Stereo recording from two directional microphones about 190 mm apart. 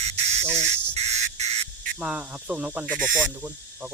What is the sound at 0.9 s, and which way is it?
Squawk, 35° right (ahead or behind).